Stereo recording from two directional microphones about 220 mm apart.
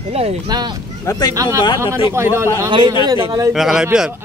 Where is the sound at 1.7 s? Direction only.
10° right (ahead or behind).